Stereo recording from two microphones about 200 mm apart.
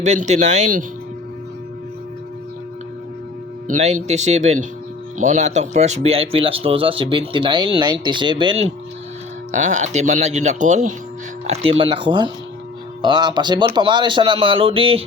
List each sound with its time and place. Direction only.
0.0 s speech: 35° right (ahead or behind)
3.7 s speech: 35° right (ahead or behind)
9.5 s speech: 35° right (ahead or behind)